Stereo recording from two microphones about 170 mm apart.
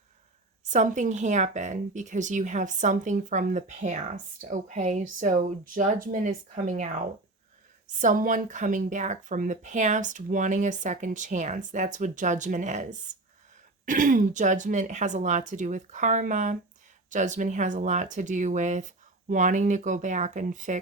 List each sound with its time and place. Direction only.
0.6 s speech: 45° right (ahead or behind)